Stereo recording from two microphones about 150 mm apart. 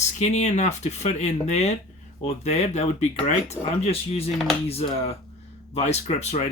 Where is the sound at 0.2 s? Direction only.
45° left (ahead or behind).